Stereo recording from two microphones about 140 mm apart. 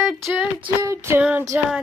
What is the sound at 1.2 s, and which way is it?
Child singing, 10° right (ahead or behind).